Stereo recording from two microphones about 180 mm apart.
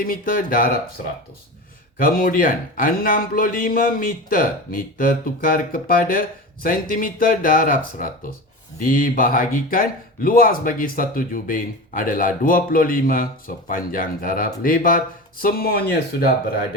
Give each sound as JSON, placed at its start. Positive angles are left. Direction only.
{"t": 0.0, "sound": "speech", "side_deg": 55}
{"t": 2.0, "sound": "speech", "side_deg": 50}